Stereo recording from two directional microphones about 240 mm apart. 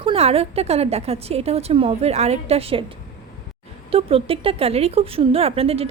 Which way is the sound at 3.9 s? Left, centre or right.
Right.